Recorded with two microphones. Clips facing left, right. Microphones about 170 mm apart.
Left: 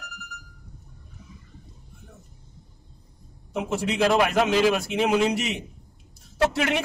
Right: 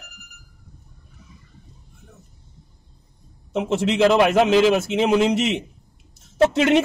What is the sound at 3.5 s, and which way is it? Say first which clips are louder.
A man's voice: right 5 dB; 25° right (ahead or behind).